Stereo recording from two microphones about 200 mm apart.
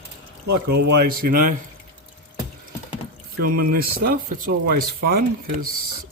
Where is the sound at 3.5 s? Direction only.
45° right (ahead or behind).